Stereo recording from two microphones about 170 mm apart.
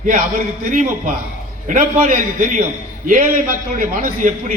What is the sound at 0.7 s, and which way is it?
A man's voice, 50° right (ahead or behind).